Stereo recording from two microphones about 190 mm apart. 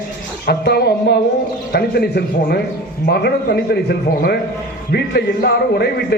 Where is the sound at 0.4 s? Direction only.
55° left (ahead or behind).